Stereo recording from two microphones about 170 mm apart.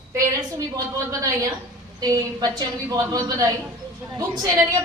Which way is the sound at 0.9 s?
20° right (ahead or behind).